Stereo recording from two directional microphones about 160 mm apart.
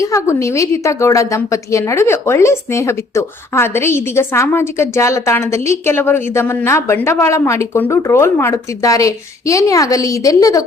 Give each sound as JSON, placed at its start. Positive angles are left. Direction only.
{"t": 0.0, "sound": "a woman's voice", "side_deg": 20}